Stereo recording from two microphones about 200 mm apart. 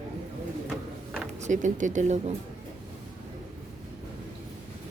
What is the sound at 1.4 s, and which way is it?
Speech, 40° right (ahead or behind).